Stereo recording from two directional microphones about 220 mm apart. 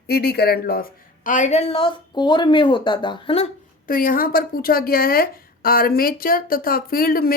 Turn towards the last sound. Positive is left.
turn(degrees=40)  # may be behind; listen again after turning